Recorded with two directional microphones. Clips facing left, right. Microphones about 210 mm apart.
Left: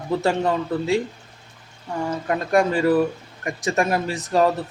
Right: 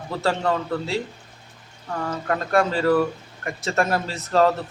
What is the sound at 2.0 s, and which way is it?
Speech, 15° left (ahead or behind).